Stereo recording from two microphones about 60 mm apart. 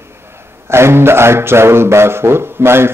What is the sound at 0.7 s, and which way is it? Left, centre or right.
Speech, right.